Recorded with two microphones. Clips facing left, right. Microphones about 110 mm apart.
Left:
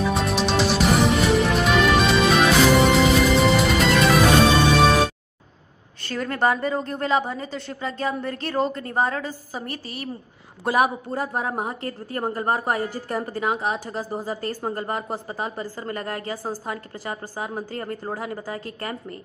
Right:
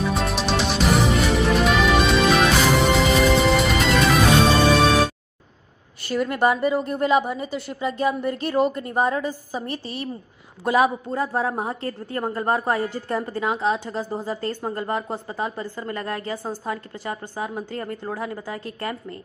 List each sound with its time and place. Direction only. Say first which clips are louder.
0.0 s music: left 1 dB; centre (ahead or behind)
6.0 s a woman's voice: right 2 dB; 15° right (ahead or behind)
10.6 s a woman's voice: right 1 dB; 25° left (ahead or behind)